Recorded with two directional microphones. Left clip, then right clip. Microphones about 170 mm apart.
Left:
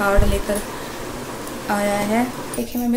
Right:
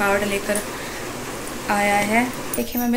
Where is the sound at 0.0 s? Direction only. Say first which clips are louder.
Left 1 dB; 10° left (ahead or behind).